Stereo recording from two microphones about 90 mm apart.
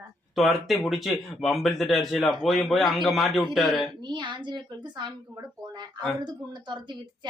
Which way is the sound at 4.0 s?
60° right (ahead or behind).